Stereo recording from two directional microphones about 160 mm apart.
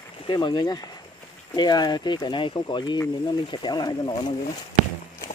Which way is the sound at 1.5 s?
25° left (ahead or behind).